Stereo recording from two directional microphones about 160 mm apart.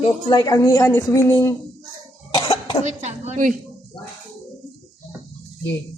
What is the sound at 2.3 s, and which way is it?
Cough, 30° left (ahead or behind).